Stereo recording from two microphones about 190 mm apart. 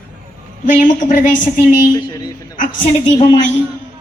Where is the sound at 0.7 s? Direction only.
45° left (ahead or behind).